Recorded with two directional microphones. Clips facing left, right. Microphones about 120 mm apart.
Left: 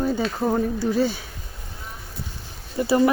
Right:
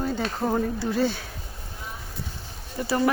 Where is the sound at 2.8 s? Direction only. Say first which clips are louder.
Left 6 dB; 15° left (ahead or behind).